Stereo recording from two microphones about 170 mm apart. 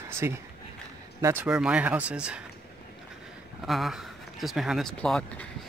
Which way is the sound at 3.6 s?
Centre (ahead or behind).